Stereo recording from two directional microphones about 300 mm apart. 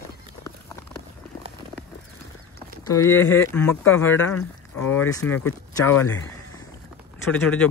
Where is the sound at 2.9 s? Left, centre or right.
Centre.